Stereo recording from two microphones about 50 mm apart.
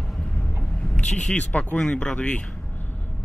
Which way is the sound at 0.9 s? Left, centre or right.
Centre.